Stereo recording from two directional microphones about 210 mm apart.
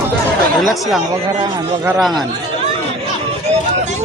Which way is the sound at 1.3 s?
20° right (ahead or behind).